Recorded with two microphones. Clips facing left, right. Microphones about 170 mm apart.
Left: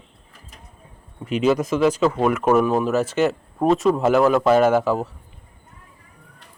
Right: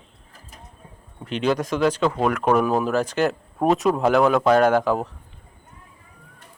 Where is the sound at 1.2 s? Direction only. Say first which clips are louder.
Left 3 dB; 5° left (ahead or behind).